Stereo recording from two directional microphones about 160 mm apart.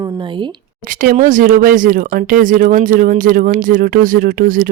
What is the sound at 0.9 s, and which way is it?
Speech, 60° right (ahead or behind).